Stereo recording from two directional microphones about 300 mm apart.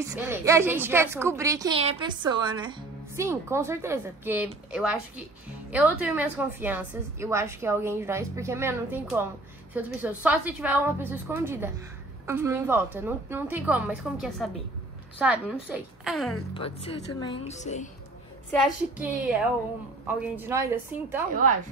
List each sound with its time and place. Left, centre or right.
0.0 s a woman's voice: centre
16.5 s speech: centre
18.5 s a woman's voice: centre
20.3 s a woman's voice: centre